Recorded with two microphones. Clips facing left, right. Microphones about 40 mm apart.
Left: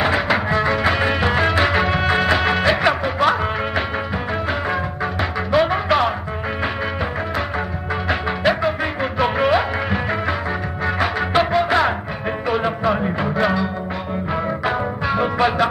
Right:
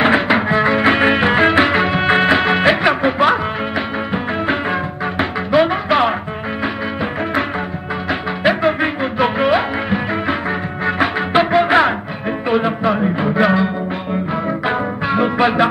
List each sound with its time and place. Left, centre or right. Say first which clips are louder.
0.0 s music: right 4 dB; right
1.8 s music: right 2 dB; centre
2.0 s music: right 4 dB; right
5.5 s music: right 2 dB; centre
8.5 s music: right 5 dB; centre
12.4 s music: right 3 dB; centre
14.6 s music: right 2 dB; centre